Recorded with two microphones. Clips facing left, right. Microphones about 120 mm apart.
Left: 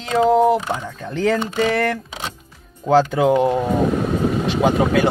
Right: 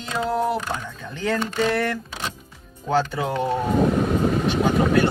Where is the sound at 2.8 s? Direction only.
90° left.